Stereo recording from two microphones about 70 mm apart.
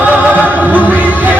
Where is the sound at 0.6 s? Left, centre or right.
Right.